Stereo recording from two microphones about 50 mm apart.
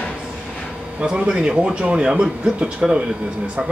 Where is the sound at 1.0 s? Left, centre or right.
Centre.